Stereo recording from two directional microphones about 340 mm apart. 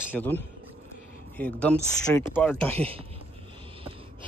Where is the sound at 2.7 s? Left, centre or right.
Centre.